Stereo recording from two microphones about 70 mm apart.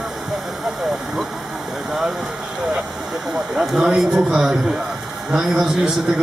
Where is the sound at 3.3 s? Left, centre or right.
Centre.